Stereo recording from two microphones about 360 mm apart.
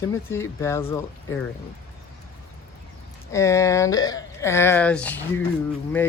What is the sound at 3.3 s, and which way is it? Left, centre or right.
Speech, centre.